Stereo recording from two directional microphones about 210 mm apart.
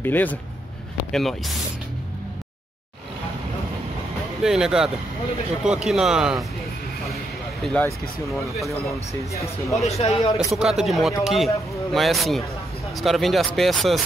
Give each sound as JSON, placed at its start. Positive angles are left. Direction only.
{"t": 0.0, "sound": "speech", "side_deg": 10}
{"t": 4.4, "sound": "speech", "side_deg": 0}
{"t": 7.6, "sound": "speech", "side_deg": 5}
{"t": 9.8, "sound": "a man's voice", "side_deg": 30}
{"t": 10.3, "sound": "speech", "side_deg": 0}